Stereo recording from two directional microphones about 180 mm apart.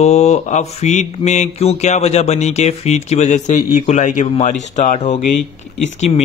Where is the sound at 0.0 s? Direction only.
40° left (ahead or behind).